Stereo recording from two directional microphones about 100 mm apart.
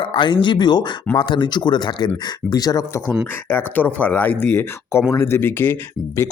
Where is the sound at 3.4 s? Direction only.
20° left (ahead or behind).